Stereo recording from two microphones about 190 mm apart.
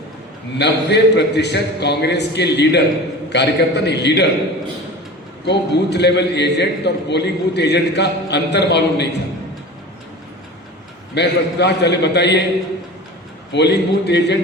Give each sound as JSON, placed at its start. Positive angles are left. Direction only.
{"t": 0.6, "sound": "a man's voice", "side_deg": 65}
{"t": 5.5, "sound": "a man's voice", "side_deg": 65}
{"t": 11.1, "sound": "a man's voice", "side_deg": 65}
{"t": 13.5, "sound": "a man's voice", "side_deg": 65}